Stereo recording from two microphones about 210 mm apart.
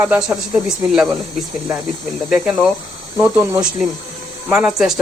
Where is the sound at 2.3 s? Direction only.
5° right (ahead or behind).